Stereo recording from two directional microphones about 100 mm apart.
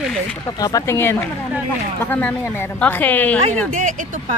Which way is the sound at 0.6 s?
35° left (ahead or behind).